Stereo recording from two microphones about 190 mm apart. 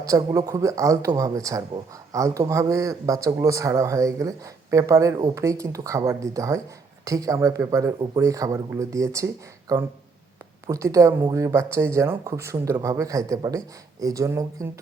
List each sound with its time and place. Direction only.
0.0 s speech: 20° right (ahead or behind)